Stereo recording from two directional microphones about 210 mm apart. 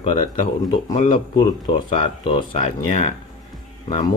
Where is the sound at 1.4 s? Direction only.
20° left (ahead or behind).